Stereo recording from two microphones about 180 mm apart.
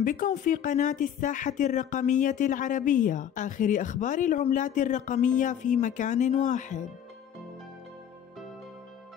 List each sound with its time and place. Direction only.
0.0 s speech: 45° left (ahead or behind)